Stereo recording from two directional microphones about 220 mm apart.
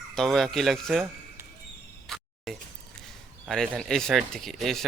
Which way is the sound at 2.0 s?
Centre (ahead or behind).